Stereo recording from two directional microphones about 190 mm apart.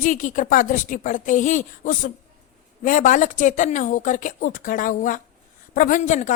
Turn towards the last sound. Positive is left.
turn(degrees=40)  # may be behind; listen again after turning